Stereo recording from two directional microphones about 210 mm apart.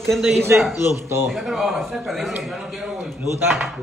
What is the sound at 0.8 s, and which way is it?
Speech, 10° right (ahead or behind).